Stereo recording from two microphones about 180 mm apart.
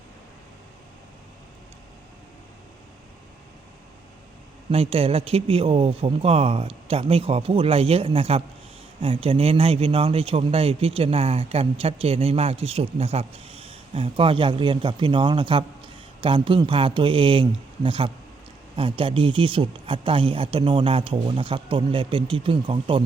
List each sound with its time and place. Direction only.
4.7 s speech: 30° right (ahead or behind)